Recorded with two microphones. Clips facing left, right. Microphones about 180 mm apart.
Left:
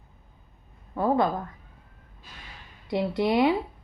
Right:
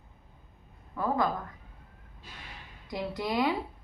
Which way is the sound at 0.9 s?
30° left (ahead or behind).